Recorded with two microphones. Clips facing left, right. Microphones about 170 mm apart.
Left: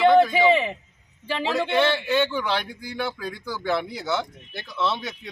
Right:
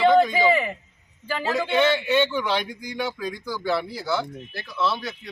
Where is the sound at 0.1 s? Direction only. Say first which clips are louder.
Left 1 dB; 10° left (ahead or behind).